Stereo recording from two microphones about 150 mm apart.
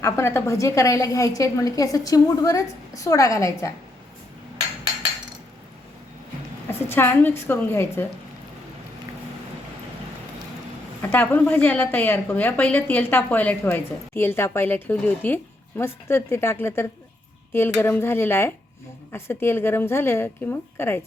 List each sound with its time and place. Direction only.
0.0 s a woman's voice: 15° left (ahead or behind)
6.7 s a woman's voice: 15° left (ahead or behind)
11.1 s a woman's voice: 15° left (ahead or behind)
17.8 s a woman's voice: 15° left (ahead or behind)